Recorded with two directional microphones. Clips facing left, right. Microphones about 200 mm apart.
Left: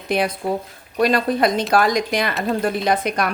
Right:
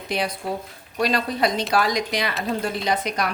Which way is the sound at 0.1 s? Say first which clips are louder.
Left 5 dB; 55° left (ahead or behind).